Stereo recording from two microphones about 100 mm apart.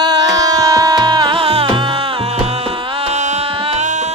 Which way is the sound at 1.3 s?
65° right (ahead or behind).